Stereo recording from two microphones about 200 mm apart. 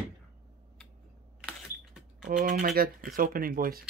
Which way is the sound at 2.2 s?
40° right (ahead or behind).